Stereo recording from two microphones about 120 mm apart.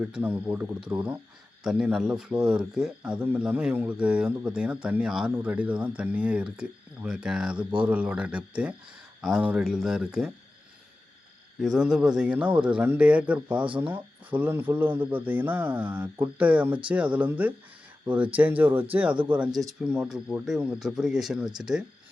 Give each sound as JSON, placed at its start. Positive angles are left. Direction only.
{"t": 0.0, "sound": "a man's voice", "side_deg": -10}
{"t": 11.6, "sound": "a man's voice", "side_deg": -5}